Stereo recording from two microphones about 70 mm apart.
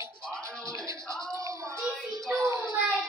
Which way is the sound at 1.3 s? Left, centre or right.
Right.